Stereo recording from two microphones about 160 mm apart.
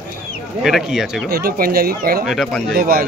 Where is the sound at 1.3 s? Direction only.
70° right (ahead or behind).